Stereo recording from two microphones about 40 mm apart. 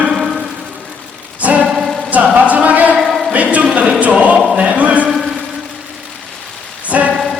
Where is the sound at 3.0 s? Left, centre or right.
Centre.